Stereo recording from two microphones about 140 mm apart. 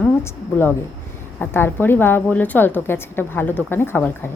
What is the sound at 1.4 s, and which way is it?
A woman's voice, 15° left (ahead or behind).